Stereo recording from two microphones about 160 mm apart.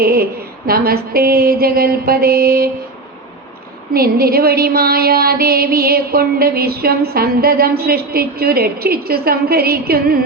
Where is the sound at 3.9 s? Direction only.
70° right (ahead or behind).